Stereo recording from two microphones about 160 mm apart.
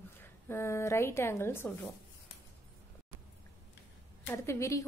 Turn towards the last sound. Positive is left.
turn(degrees=20)  # may be behind; listen again after turning